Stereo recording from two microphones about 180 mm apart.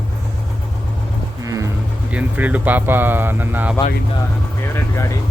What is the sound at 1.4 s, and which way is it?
Music, 20° right (ahead or behind).